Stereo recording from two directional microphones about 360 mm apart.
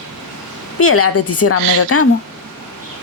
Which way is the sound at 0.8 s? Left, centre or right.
Left.